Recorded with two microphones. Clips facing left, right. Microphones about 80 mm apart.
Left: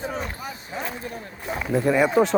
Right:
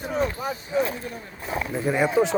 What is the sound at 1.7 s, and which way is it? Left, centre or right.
Speech, left.